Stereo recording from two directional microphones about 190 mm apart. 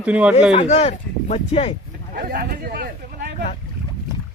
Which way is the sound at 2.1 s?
55° right (ahead or behind).